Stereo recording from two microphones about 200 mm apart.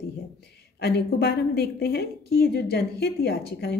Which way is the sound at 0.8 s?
50° left (ahead or behind).